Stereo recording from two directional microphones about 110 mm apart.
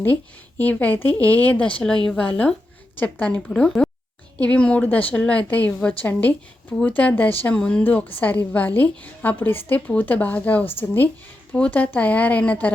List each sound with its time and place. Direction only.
0.6 s a woman's voice: 15° left (ahead or behind)